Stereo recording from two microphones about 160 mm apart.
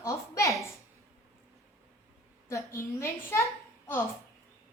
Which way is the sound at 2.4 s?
15° left (ahead or behind).